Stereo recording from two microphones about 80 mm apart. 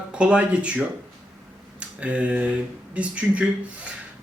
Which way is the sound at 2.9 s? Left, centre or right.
Centre.